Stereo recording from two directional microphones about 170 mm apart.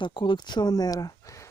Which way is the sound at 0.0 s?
30° left (ahead or behind).